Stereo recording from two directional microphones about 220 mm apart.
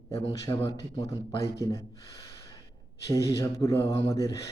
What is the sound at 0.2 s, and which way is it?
A man's voice, 15° left (ahead or behind).